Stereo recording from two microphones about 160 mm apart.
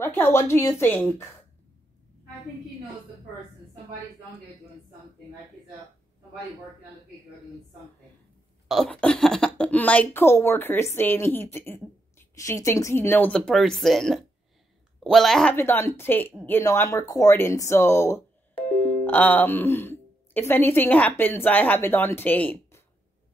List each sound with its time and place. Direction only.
0.0 s speech: 15° left (ahead or behind)
8.6 s speech: 5° left (ahead or behind)
15.5 s speech: 15° left (ahead or behind)